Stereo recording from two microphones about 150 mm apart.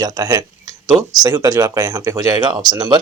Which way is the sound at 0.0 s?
25° right (ahead or behind).